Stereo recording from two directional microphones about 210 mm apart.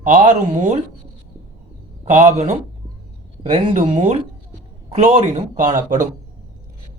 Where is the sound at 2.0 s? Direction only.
35° right (ahead or behind).